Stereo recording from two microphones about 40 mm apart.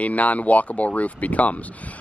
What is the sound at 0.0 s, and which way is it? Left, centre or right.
Speech, left.